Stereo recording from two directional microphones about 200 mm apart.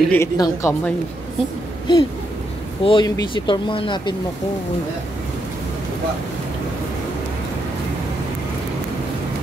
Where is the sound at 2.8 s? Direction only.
20° left (ahead or behind).